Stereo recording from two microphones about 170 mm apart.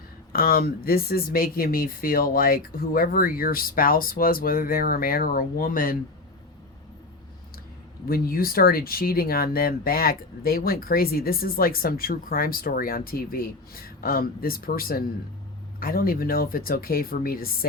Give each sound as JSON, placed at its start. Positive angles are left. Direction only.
{"t": 0.3, "sound": "speech", "side_deg": 60}
{"t": 8.0, "sound": "speech", "side_deg": 60}